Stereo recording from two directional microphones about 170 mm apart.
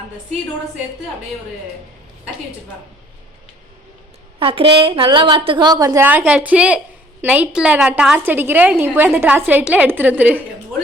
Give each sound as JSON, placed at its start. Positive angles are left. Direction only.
{"t": 4.4, "sound": "a woman's voice", "side_deg": -30}
{"t": 6.1, "sound": "a woman's voice", "side_deg": -10}